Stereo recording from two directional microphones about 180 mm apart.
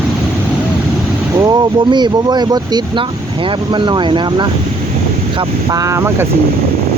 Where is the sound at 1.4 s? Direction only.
25° right (ahead or behind).